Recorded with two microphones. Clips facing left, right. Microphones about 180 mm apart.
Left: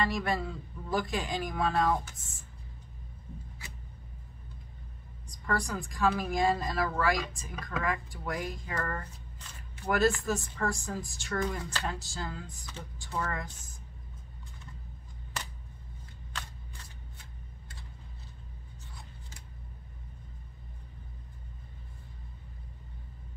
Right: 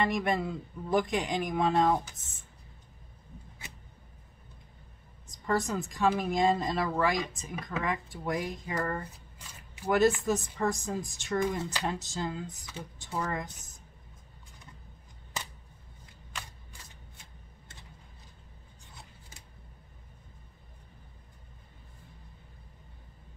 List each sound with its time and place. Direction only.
0.0 s speech: 20° right (ahead or behind)
5.5 s speech: 20° right (ahead or behind)